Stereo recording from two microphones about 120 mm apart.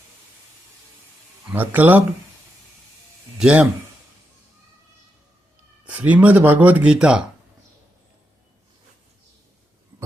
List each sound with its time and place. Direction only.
1.5 s speech: 15° right (ahead or behind)
3.3 s speech: 10° right (ahead or behind)
5.8 s speech: 10° right (ahead or behind)